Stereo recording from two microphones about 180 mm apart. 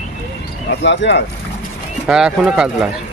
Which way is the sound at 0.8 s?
80° left.